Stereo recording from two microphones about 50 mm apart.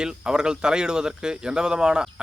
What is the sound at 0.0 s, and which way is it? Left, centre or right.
Speech, centre.